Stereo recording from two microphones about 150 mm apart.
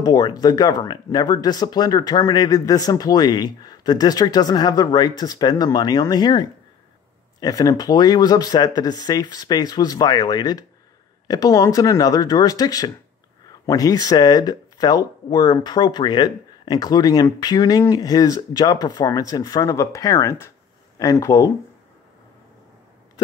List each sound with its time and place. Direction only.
0.0 s speech: 25° left (ahead or behind)